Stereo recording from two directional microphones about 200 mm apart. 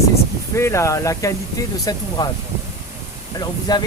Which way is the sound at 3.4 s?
20° left (ahead or behind).